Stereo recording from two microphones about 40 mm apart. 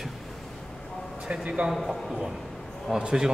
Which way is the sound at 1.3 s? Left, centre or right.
Right.